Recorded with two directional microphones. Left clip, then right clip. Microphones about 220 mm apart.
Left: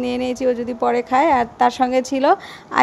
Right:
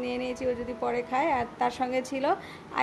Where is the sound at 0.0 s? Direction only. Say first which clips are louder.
Left 10 dB; 40° left (ahead or behind).